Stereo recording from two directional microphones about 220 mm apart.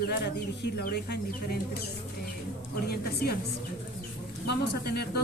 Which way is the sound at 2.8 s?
45° left (ahead or behind).